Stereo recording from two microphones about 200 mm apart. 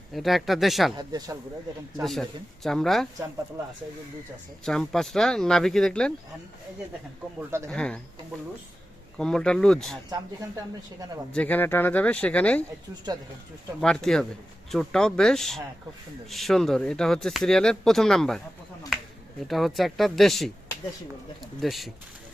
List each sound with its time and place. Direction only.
0.1 s speech: centre (ahead or behind)
0.9 s speech: 20° right (ahead or behind)
2.0 s speech: centre (ahead or behind)
4.6 s speech: centre (ahead or behind)
7.7 s speech: 5° left (ahead or behind)
9.1 s speech: 5° left (ahead or behind)
11.3 s speech: 5° left (ahead or behind)
13.8 s speech: 5° left (ahead or behind)
19.5 s speech: centre (ahead or behind)